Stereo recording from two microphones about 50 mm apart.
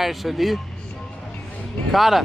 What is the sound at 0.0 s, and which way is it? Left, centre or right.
Speech, centre.